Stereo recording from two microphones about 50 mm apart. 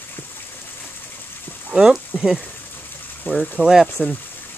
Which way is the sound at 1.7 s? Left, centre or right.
Centre.